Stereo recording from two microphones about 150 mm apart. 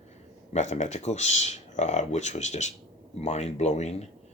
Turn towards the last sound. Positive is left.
turn(degrees=50)  # may be behind; listen again after turning